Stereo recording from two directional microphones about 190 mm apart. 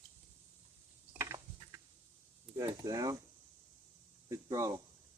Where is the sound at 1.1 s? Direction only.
15° right (ahead or behind).